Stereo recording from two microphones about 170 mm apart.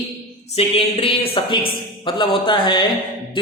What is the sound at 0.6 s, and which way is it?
A man's voice, 35° left (ahead or behind).